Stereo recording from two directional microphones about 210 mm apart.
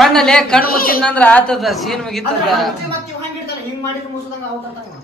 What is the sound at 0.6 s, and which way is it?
Speech, 45° left (ahead or behind).